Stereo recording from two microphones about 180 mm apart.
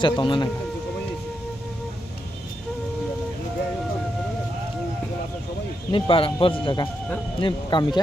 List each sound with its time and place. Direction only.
0.0 s speech: 25° left (ahead or behind)
5.9 s speech: 30° left (ahead or behind)